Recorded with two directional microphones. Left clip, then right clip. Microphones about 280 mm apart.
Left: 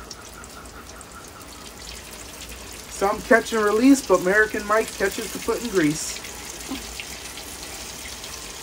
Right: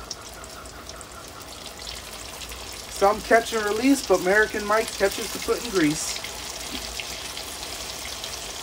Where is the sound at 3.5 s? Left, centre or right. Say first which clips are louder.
Left 4 dB; centre.